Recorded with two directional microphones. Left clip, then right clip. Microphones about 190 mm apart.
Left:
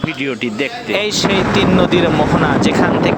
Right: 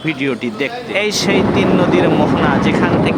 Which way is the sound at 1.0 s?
45° left (ahead or behind).